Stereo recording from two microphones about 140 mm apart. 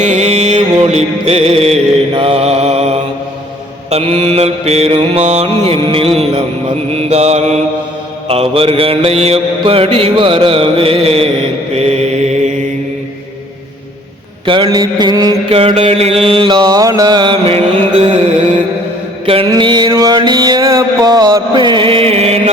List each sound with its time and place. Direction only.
0.0 s music: 55° right (ahead or behind)
3.8 s mantra: 45° right (ahead or behind)
14.4 s mantra: 35° right (ahead or behind)
15.4 s mantra: 45° right (ahead or behind)
19.2 s mantra: 40° right (ahead or behind)